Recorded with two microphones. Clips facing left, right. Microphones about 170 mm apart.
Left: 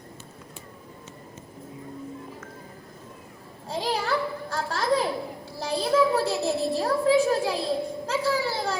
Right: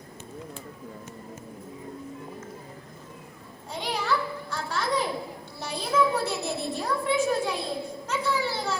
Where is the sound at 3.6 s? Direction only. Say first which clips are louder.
Left 2 dB; 30° left (ahead or behind).